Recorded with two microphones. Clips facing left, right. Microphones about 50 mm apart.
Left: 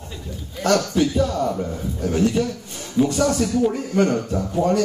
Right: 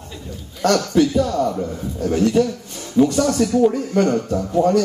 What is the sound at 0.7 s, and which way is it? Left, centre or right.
Speech, centre.